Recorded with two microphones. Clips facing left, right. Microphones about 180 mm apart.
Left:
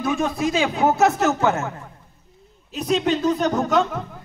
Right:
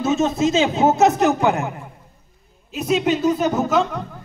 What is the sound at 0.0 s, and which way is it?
A man's voice, 25° right (ahead or behind).